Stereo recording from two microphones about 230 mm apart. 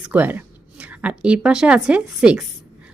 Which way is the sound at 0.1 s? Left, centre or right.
Centre.